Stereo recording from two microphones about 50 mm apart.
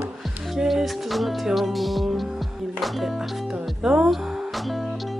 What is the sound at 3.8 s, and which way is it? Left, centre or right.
Music, centre.